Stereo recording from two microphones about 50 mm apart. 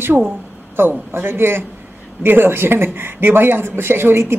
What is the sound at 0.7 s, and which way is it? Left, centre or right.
Speech, right.